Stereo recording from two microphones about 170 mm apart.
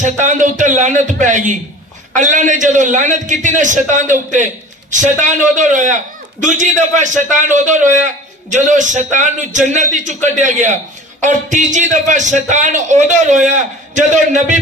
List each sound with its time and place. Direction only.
0.0 s a man's voice: 45° right (ahead or behind)